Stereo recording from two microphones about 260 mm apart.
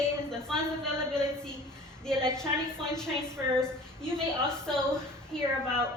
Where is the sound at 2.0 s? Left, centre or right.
Centre.